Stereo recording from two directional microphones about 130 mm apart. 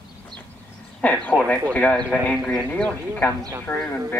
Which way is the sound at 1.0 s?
10° left (ahead or behind).